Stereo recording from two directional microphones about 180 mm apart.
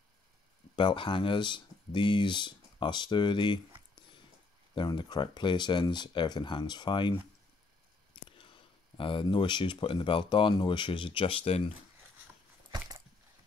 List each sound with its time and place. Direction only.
0.7 s speech: 30° left (ahead or behind)
4.7 s speech: 25° left (ahead or behind)
8.3 s speech: 30° left (ahead or behind)
12.7 s a sound: 20° right (ahead or behind)